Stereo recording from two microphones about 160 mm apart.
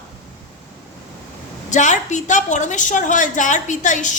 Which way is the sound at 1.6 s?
50° left (ahead or behind).